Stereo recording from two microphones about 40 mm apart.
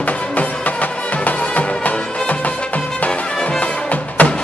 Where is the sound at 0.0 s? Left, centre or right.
Left.